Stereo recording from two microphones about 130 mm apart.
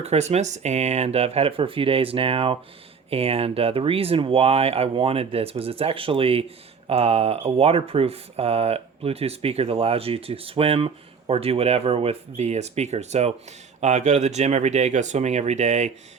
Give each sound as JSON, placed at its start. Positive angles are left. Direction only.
{"t": 0.0, "sound": "speech", "side_deg": -55}